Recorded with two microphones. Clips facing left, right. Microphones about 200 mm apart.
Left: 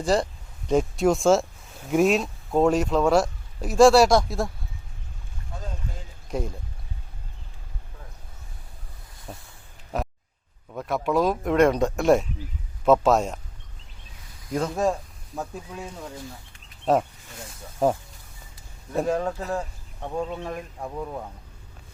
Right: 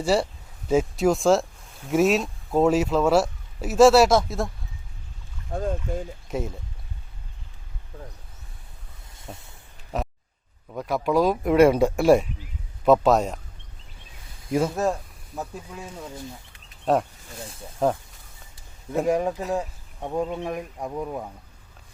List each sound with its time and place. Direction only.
0.0 s speech: 5° right (ahead or behind)
5.5 s speech: 55° right (ahead or behind)
6.3 s speech: 5° right (ahead or behind)
9.1 s a sound: 25° right (ahead or behind)
9.9 s a sound: centre (ahead or behind)
10.7 s speech: centre (ahead or behind)
14.5 s speech: 5° right (ahead or behind)
16.8 s speech: centre (ahead or behind)
18.9 s speech: 15° right (ahead or behind)